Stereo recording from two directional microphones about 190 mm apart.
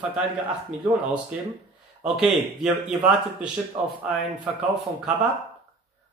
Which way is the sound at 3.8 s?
25° right (ahead or behind).